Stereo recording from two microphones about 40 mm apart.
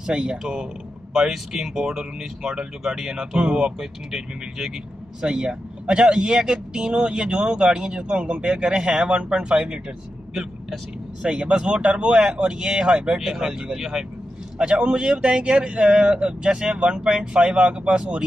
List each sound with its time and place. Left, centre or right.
0.1 s speech: right
1.1 s speech: centre
3.4 s speech: right
4.1 s speech: centre
11.2 s speech: right
14.6 s speech: right